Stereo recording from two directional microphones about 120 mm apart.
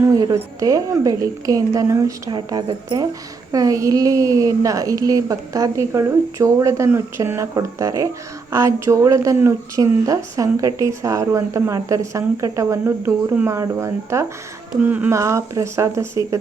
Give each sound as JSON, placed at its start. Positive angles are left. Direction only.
{"t": 0.0, "sound": "speech", "side_deg": -30}
{"t": 2.3, "sound": "a woman's voice", "side_deg": -35}
{"t": 14.8, "sound": "speech", "side_deg": -15}
{"t": 15.2, "sound": "speech", "side_deg": -25}